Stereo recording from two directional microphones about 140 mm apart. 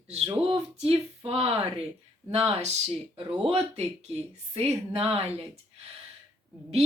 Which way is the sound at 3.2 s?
45° right (ahead or behind).